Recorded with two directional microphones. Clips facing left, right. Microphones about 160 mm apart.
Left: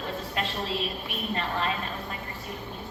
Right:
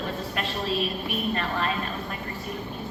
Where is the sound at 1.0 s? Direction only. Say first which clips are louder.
Right 4 dB; 20° left (ahead or behind).